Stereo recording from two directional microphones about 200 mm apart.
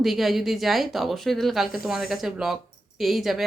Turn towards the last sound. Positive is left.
turn(degrees=0)  # may be behind; listen again after turning